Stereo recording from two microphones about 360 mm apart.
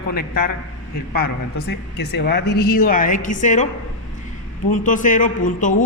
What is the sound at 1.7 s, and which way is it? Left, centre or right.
A man's voice, left.